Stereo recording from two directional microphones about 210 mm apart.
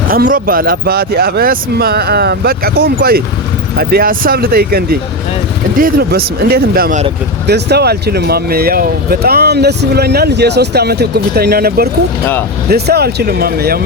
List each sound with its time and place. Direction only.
0.1 s speech: 40° right (ahead or behind)
12.2 s speech: 10° left (ahead or behind)
12.6 s speech: 50° right (ahead or behind)